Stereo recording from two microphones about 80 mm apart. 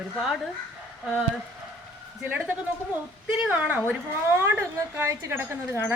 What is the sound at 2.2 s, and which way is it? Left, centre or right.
Speech, right.